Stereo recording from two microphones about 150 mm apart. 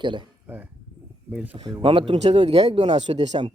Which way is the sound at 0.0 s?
30° right (ahead or behind).